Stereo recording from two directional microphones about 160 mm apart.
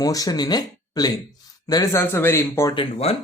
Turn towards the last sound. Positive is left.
turn(degrees=35)  # may be behind; listen again after turning